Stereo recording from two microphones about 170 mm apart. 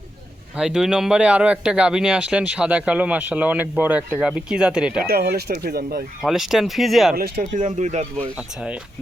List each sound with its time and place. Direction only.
0.5 s speech: 5° right (ahead or behind)
5.0 s speech: 65° right (ahead or behind)
6.2 s speech: centre (ahead or behind)
7.2 s speech: 50° right (ahead or behind)
8.4 s speech: 5° right (ahead or behind)